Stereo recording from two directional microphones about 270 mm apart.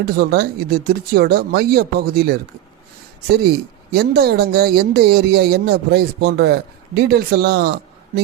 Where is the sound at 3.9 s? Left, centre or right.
Right.